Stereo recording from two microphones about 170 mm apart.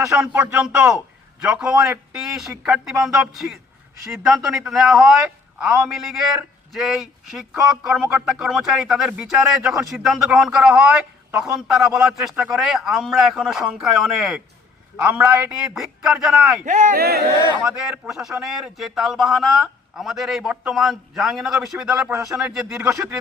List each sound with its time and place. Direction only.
0.2 s a man's voice: 5° right (ahead or behind)
11.3 s speech: 15° right (ahead or behind)
11.7 s speech: 5° right (ahead or behind)
16.6 s speech: 45° right (ahead or behind)
17.0 s speech: 70° right (ahead or behind)
17.6 s speech: 5° right (ahead or behind)
22.8 s a man's voice: 20° right (ahead or behind)